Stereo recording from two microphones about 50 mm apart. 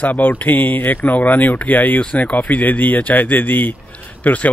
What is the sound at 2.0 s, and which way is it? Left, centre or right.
Speech, left.